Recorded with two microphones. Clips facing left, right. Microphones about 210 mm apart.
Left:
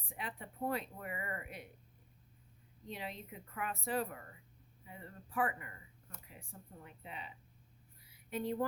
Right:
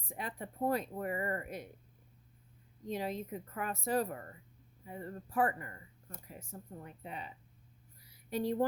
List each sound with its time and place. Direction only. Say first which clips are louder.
0.1 s speech: right 4 dB; 40° right (ahead or behind)
2.9 s speech: right 8 dB; 40° right (ahead or behind)
8.0 s a sound: right 4 dB; 35° right (ahead or behind)